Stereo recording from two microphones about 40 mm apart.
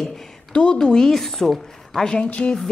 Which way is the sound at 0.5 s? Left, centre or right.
Left.